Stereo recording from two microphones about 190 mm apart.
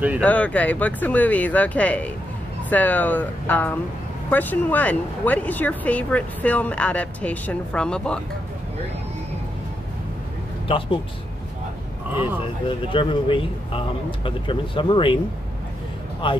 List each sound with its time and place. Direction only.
0.2 s speech: 5° left (ahead or behind)
12.2 s a man's voice: 25° left (ahead or behind)
16.2 s a man's voice: 25° left (ahead or behind)